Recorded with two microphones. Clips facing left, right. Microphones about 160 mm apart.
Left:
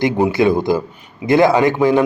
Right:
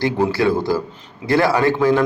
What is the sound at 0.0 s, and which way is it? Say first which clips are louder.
A man's voice: left 3 dB; 20° left (ahead or behind).